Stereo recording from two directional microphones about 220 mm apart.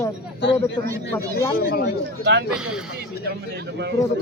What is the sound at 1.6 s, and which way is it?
Speech, 50° left (ahead or behind).